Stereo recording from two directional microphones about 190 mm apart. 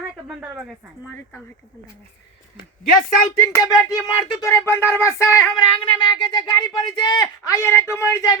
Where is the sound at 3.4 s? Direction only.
15° left (ahead or behind).